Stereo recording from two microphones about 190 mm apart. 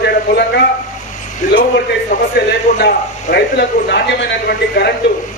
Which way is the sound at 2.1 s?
40° left (ahead or behind).